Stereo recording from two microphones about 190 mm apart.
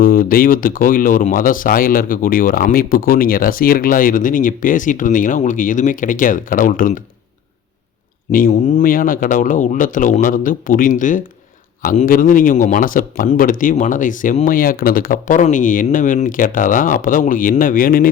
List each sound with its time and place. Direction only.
0.0 s speech: 50° left (ahead or behind)
8.3 s speech: 45° left (ahead or behind)